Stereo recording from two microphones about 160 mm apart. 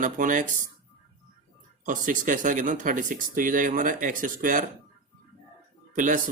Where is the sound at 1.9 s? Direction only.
55° right (ahead or behind).